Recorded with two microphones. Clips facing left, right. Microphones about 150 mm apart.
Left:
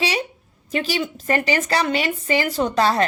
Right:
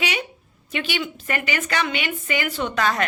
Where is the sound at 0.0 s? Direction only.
35° left (ahead or behind).